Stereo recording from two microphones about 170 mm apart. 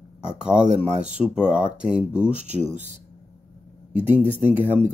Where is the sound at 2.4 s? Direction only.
45° right (ahead or behind).